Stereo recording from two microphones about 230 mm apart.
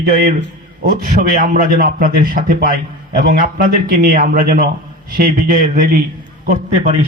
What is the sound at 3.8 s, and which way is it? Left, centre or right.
Speech, right.